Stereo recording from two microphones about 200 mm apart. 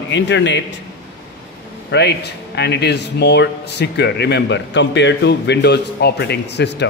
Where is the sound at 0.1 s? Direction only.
65° left (ahead or behind).